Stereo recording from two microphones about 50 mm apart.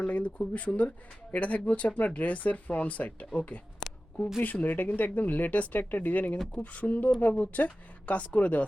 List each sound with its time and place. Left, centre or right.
0.0 s speech: left
4.6 s speech: left